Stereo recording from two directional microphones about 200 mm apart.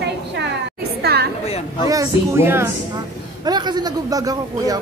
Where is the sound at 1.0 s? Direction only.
50° right (ahead or behind).